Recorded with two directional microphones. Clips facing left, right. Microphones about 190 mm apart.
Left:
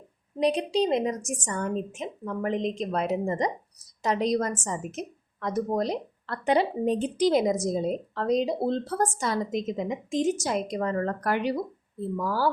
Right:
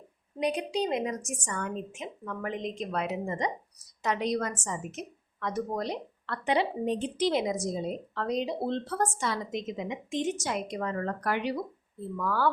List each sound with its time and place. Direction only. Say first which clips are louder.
0.3 s a woman's voice: left 5 dB; 35° left (ahead or behind)